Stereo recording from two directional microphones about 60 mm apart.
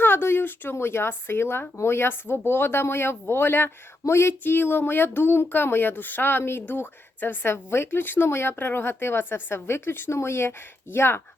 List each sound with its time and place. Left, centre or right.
0.0 s speech: left